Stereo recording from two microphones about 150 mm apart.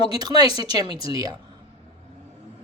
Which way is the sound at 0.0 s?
25° right (ahead or behind).